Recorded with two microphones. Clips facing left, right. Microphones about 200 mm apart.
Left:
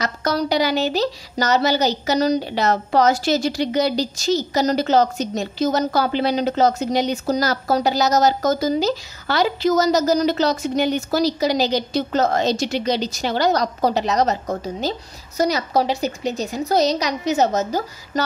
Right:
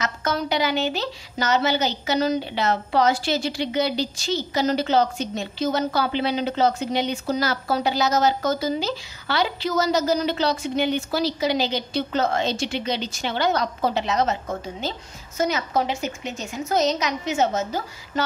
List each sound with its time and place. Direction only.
0.0 s a woman's voice: 35° left (ahead or behind)